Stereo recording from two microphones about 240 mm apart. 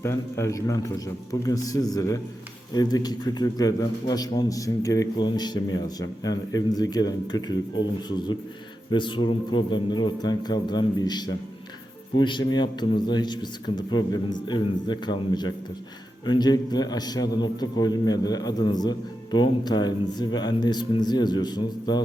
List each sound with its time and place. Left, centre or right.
0.0 s a man's voice: centre